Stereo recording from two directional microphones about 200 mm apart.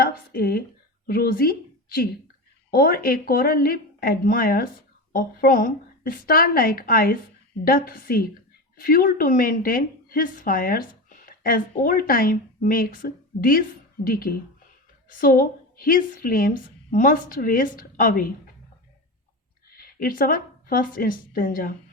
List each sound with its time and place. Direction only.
0.0 s a woman's voice: 50° left (ahead or behind)
19.7 s a woman's voice: 45° left (ahead or behind)